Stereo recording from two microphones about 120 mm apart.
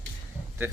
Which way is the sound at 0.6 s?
20° right (ahead or behind).